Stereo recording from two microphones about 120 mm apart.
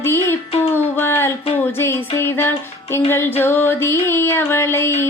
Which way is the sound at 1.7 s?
20° left (ahead or behind).